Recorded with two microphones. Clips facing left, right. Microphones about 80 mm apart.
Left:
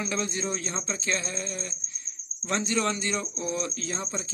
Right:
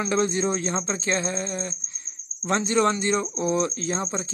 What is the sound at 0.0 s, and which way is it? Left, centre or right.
Speech, right.